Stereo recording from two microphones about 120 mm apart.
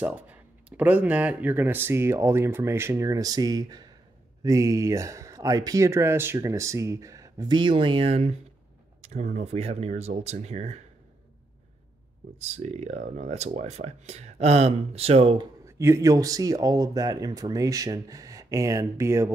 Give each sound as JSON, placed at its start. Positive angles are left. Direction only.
{"t": 0.0, "sound": "speech", "side_deg": -10}
{"t": 9.0, "sound": "speech", "side_deg": -70}
{"t": 12.4, "sound": "speech", "side_deg": -70}
{"t": 15.6, "sound": "speech", "side_deg": -25}